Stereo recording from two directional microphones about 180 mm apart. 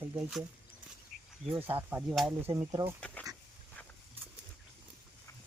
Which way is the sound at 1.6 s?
10° right (ahead or behind).